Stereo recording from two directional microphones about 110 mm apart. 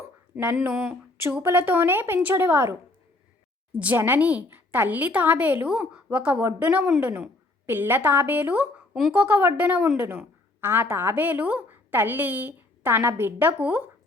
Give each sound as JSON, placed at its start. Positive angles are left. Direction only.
{"t": 0.5, "sound": "a woman's voice", "side_deg": -10}
{"t": 1.4, "sound": "a woman's voice", "side_deg": -20}
{"t": 3.8, "sound": "a woman's voice", "side_deg": -15}
{"t": 9.1, "sound": "a woman's voice", "side_deg": -15}